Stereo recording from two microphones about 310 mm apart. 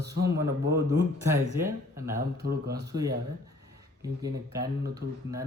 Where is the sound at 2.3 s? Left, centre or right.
Right.